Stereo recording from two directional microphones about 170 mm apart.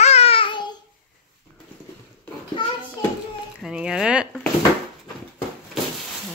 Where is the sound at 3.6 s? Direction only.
5° right (ahead or behind).